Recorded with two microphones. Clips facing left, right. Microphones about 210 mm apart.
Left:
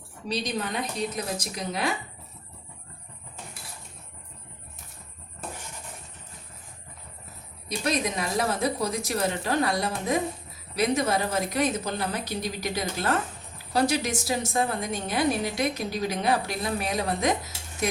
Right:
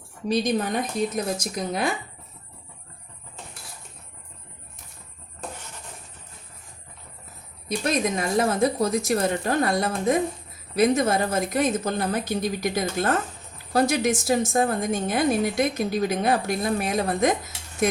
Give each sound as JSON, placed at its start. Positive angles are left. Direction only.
{"t": 0.3, "sound": "a woman's voice", "side_deg": -50}
{"t": 7.7, "sound": "a woman's voice", "side_deg": -50}